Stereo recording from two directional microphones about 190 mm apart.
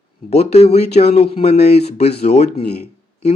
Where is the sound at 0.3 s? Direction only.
35° left (ahead or behind).